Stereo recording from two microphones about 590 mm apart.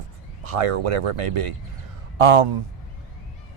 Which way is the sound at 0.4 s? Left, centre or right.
Right.